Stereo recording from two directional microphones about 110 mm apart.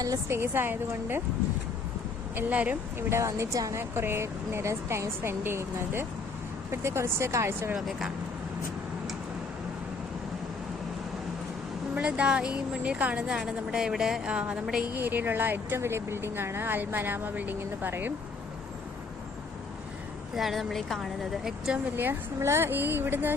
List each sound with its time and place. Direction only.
0.0 s speech: 25° right (ahead or behind)
2.3 s speech: 15° right (ahead or behind)
7.8 s a woman's voice: centre (ahead or behind)
11.9 s speech: 10° right (ahead or behind)
20.3 s a woman's voice: centre (ahead or behind)
21.9 s speech: 20° right (ahead or behind)